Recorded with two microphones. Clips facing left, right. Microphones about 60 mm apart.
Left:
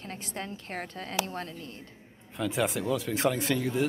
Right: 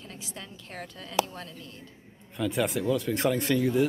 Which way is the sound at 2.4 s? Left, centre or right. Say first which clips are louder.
Right 1 dB; centre.